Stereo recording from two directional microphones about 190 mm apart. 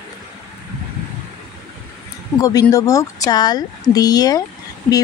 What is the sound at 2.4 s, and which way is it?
Speech, 20° left (ahead or behind).